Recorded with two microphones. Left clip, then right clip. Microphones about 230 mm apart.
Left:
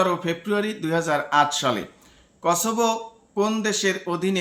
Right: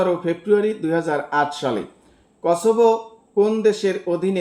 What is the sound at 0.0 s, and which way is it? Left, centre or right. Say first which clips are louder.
Speech: right 2 dB; left.